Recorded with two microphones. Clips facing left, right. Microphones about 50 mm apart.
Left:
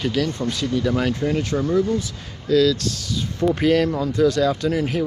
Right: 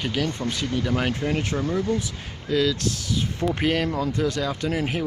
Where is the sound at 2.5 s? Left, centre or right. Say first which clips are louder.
Left 5 dB; centre.